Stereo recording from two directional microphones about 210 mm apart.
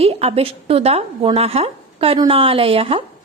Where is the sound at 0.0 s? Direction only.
30° right (ahead or behind).